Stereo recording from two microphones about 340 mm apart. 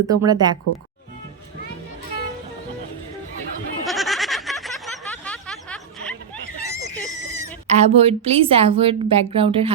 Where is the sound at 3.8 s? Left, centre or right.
Centre.